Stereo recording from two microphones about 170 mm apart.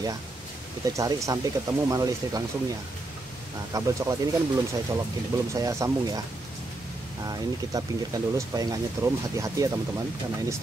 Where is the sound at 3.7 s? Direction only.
20° right (ahead or behind).